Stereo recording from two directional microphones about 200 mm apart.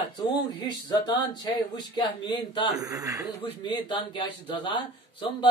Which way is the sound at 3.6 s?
25° left (ahead or behind).